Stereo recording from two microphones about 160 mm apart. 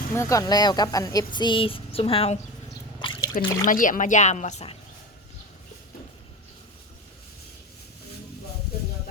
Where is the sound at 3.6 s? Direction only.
55° left (ahead or behind).